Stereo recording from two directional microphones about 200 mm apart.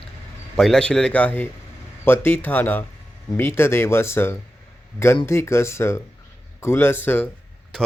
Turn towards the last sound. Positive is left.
turn(degrees=10)  # may be behind; listen again after turning